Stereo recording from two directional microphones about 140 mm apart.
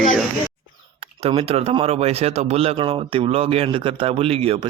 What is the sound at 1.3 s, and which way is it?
Speech, 45° right (ahead or behind).